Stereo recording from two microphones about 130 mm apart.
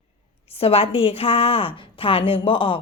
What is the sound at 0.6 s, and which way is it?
A woman's voice, 45° left (ahead or behind).